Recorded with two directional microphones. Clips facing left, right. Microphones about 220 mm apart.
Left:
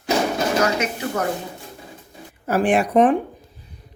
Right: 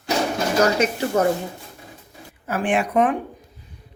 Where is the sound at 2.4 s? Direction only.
40° left (ahead or behind).